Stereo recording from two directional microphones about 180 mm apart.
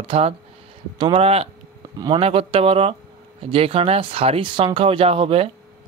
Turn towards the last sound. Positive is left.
turn(degrees=-30)  # may be behind; listen again after turning